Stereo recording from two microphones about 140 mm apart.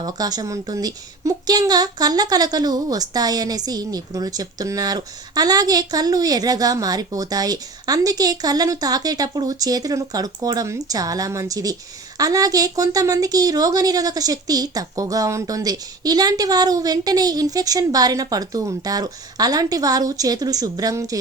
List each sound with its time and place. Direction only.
0.0 s a woman's voice: 25° right (ahead or behind)